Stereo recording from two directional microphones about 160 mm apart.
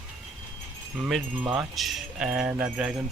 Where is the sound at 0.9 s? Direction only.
5° right (ahead or behind).